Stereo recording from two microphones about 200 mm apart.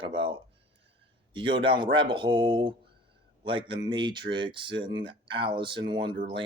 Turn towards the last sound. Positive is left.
turn(degrees=-25)  # may be behind; listen again after turning